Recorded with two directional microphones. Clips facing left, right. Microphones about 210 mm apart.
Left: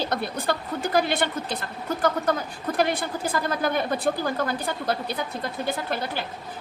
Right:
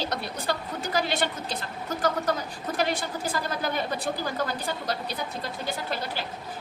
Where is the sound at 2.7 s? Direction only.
55° left (ahead or behind).